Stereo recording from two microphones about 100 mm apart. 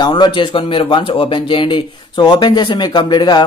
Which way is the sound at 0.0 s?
45° left (ahead or behind).